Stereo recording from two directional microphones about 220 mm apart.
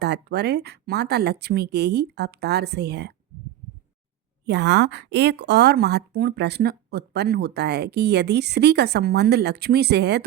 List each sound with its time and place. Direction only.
0.0 s a woman's voice: 50° right (ahead or behind)
4.4 s a woman's voice: 50° right (ahead or behind)